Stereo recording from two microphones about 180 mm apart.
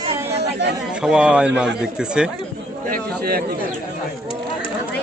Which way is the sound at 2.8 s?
55° right (ahead or behind).